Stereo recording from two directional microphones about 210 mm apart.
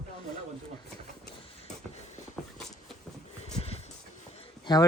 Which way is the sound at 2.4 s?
5° left (ahead or behind).